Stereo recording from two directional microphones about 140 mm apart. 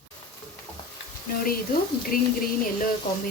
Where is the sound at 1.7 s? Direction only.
90° left.